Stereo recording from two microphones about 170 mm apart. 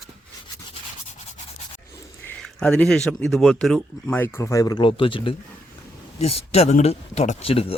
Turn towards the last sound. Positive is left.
turn(degrees=35)  # may be behind; listen again after turning